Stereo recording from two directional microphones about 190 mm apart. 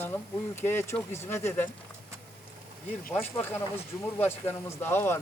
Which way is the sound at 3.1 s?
10° left (ahead or behind).